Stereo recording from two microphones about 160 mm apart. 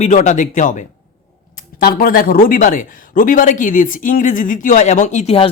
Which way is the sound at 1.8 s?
65° left (ahead or behind).